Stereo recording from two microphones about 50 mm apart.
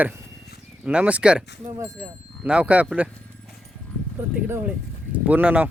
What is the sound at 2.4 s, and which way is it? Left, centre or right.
Speech, right.